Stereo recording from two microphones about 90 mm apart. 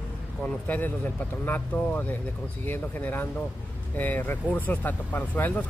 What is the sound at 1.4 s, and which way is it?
Speech, 20° left (ahead or behind).